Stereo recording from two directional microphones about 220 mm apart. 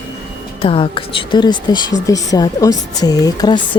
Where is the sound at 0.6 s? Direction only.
25° left (ahead or behind).